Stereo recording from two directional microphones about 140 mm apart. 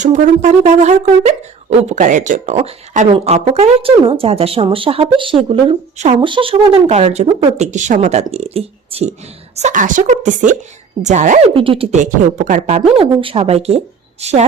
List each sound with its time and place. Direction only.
0.0 s shofar: 60° right (ahead or behind)
3.1 s a woman's voice: 50° right (ahead or behind)
9.6 s shofar: 60° right (ahead or behind)
11.5 s speech: 40° right (ahead or behind)
11.9 s a woman's voice: 60° right (ahead or behind)